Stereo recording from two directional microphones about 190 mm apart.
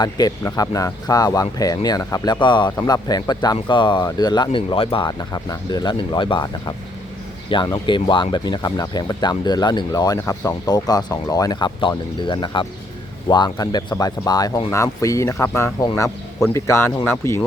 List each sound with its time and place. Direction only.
0.0 s speech: 20° left (ahead or behind)